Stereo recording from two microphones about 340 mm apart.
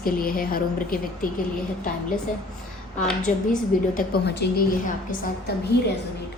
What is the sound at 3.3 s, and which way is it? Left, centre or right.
A woman's voice, left.